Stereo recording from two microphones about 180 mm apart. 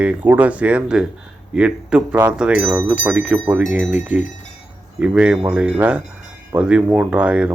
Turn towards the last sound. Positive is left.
turn(degrees=-5)  # may be behind; listen again after turning